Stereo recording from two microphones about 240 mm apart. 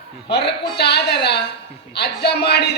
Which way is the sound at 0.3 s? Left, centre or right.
Left.